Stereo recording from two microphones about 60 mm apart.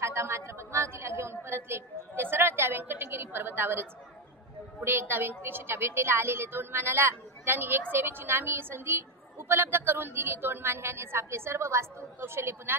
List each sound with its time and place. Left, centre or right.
0.0 s a woman's voice: right
4.8 s a woman's voice: right